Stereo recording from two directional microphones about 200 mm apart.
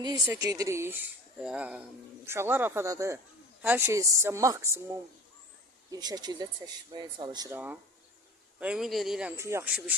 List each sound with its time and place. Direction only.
0.0 s a woman's voice: 20° right (ahead or behind)
5.9 s a woman's voice: 20° right (ahead or behind); by 9.3 s centre (ahead or behind)
9.3 s a woman's voice: 15° right (ahead or behind)